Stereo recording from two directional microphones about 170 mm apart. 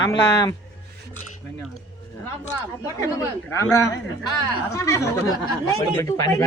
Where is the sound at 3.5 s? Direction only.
20° left (ahead or behind).